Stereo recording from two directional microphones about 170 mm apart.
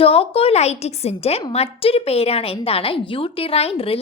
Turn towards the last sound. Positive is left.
turn(degrees=35)  # may be behind; listen again after turning